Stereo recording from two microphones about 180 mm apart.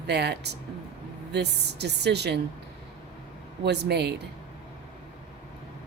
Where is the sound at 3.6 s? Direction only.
65° right (ahead or behind).